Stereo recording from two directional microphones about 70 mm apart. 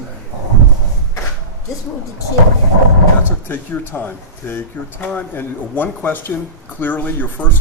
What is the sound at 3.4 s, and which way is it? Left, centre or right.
Speech, left.